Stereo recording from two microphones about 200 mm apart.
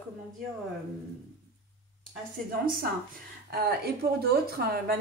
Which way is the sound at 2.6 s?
45° right (ahead or behind).